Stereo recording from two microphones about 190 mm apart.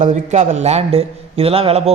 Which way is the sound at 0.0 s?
40° right (ahead or behind).